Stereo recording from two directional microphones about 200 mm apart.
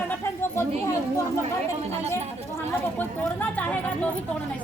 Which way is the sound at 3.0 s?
10° left (ahead or behind).